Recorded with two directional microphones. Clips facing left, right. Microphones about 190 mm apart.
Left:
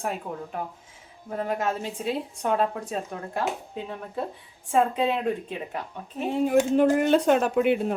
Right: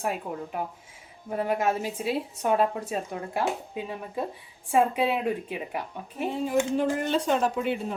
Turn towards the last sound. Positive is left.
turn(degrees=60)  # may be behind; listen again after turning